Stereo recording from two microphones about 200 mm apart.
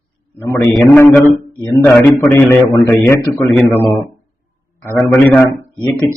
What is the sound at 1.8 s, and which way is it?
Speech, 10° left (ahead or behind).